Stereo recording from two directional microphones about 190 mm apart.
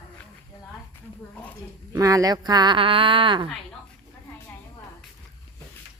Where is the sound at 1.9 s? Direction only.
15° right (ahead or behind).